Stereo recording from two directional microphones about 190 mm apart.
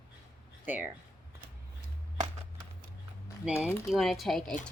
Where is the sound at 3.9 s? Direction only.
Centre (ahead or behind).